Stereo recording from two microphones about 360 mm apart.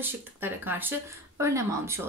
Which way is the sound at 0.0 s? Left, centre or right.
Centre.